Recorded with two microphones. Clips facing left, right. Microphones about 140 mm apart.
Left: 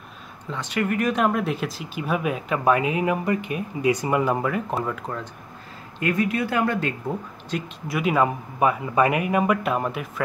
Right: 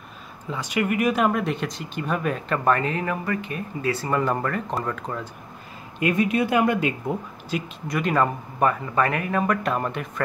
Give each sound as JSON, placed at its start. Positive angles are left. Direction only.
{"t": 0.5, "sound": "speech", "side_deg": -10}
{"t": 5.9, "sound": "speech", "side_deg": -20}
{"t": 7.9, "sound": "speech", "side_deg": 5}